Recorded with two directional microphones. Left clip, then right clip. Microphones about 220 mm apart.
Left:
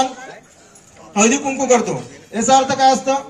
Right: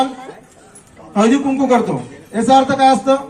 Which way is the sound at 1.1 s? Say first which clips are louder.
Right 2 dB; 35° left (ahead or behind).